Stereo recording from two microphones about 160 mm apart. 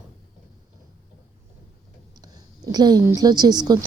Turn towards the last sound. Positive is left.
turn(degrees=-25)  # may be behind; listen again after turning